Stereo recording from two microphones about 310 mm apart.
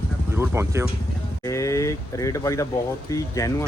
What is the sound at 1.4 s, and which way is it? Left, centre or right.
Speech, centre.